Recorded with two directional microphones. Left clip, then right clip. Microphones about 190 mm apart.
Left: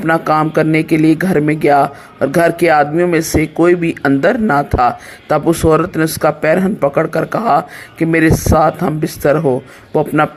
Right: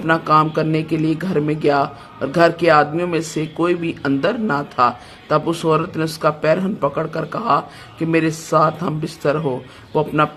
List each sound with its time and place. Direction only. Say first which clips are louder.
0.0 s speech: left 2 dB; 25° left (ahead or behind)